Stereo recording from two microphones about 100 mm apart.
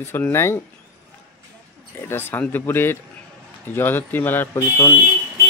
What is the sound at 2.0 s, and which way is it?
Speech, 20° left (ahead or behind).